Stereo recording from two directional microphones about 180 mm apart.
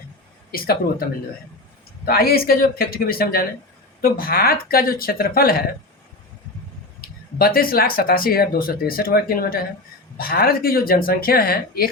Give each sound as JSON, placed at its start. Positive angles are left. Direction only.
{"t": 0.5, "sound": "speech", "side_deg": 55}
{"t": 2.0, "sound": "speech", "side_deg": 55}
{"t": 7.0, "sound": "speech", "side_deg": 55}